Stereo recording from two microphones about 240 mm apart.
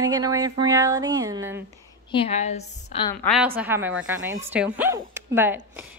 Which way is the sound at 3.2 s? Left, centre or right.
Centre.